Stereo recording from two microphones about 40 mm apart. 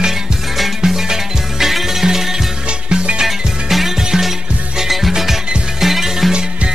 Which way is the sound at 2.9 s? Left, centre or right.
Right.